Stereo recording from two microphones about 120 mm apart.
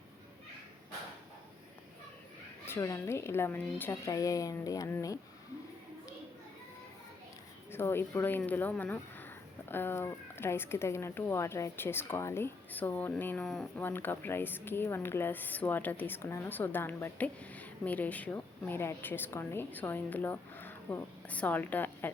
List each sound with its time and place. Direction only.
2.6 s speech: 25° left (ahead or behind)
7.7 s speech: 20° left (ahead or behind)
13.8 s a woman's voice: 15° left (ahead or behind)